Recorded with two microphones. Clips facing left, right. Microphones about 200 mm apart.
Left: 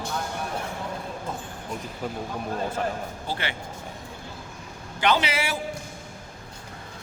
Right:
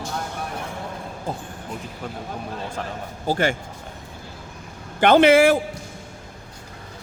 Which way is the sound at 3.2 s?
45° right (ahead or behind).